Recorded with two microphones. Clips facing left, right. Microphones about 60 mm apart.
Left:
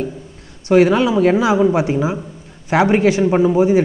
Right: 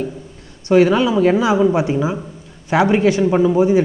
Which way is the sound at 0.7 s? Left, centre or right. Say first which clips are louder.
Even; centre.